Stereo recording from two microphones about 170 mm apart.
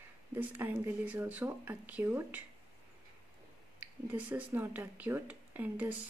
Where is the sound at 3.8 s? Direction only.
10° right (ahead or behind).